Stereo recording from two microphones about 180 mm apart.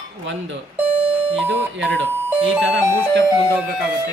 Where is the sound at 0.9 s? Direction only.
35° right (ahead or behind).